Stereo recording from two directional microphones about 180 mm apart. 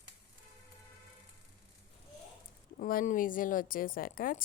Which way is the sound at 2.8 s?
50° left (ahead or behind).